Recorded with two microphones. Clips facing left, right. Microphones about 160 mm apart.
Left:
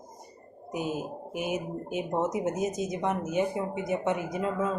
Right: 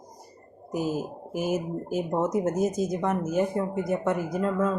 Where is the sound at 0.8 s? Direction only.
40° right (ahead or behind).